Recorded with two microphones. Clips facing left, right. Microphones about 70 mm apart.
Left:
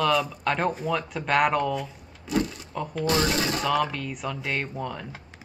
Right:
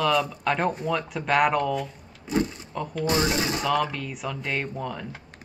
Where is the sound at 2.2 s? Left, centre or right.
Right.